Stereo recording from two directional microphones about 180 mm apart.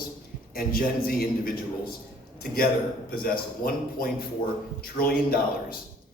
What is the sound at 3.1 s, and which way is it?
A man's voice, 55° left (ahead or behind).